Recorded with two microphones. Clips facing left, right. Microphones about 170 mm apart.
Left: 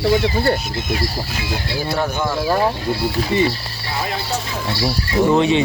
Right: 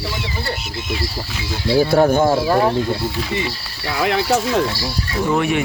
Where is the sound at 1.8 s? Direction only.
50° right (ahead or behind).